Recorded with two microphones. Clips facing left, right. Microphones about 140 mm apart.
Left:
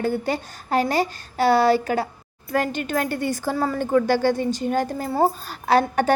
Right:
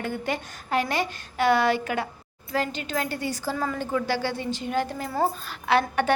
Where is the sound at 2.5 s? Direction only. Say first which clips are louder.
Left 5 dB; 50° left (ahead or behind).